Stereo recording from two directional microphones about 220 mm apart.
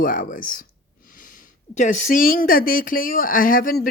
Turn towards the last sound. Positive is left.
turn(degrees=40)  # may be behind; listen again after turning